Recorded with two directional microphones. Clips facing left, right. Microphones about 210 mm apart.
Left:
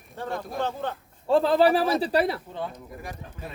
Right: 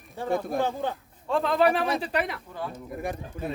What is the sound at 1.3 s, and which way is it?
Speech, 30° left (ahead or behind).